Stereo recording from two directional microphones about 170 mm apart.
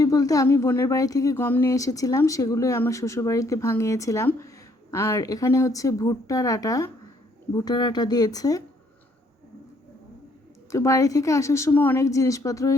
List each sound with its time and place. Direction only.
0.0 s speech: 20° left (ahead or behind)
10.7 s a woman's voice: 15° left (ahead or behind)